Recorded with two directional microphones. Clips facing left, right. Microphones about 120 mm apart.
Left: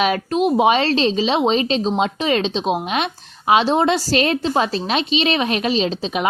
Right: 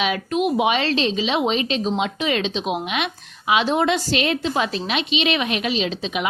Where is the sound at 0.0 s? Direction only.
40° left (ahead or behind).